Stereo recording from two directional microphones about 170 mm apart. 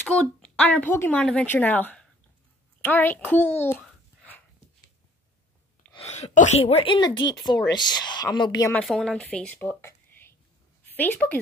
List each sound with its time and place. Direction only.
0.0 s speech: 5° left (ahead or behind)
3.8 s a sound: 5° left (ahead or behind)
5.9 s speech: 40° left (ahead or behind); by 8.6 s 25° left (ahead or behind)
8.8 s a woman's voice: 5° left (ahead or behind)